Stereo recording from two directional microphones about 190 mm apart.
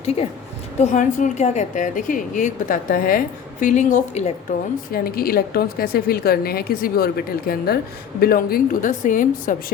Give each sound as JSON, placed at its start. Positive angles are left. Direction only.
{"t": 0.0, "sound": "a woman's voice", "side_deg": 30}
{"t": 4.9, "sound": "a woman's voice", "side_deg": 50}